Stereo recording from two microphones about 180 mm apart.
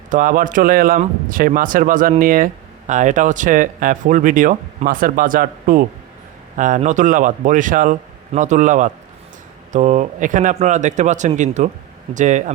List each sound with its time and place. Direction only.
0.1 s speech: 50° right (ahead or behind)